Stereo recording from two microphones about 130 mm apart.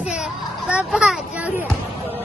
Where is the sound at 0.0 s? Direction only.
5° right (ahead or behind).